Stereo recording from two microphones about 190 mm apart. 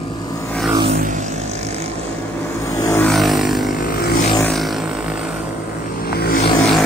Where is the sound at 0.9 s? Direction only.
40° right (ahead or behind).